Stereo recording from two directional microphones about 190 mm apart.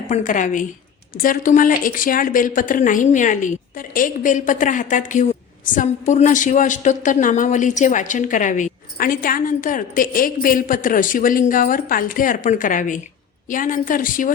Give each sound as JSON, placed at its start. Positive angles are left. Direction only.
{"t": 0.1, "sound": "a woman's voice", "side_deg": 40}